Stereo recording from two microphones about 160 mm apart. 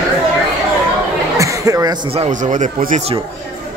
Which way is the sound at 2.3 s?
50° right (ahead or behind).